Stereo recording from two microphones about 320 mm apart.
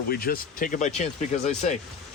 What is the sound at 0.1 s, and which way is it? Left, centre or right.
Speech, left.